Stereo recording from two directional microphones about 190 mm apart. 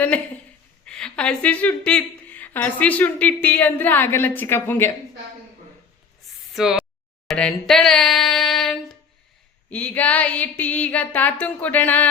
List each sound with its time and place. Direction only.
0.9 s a woman's voice: 5° left (ahead or behind)
6.5 s a sound: centre (ahead or behind)
9.6 s a woman's voice: 10° left (ahead or behind)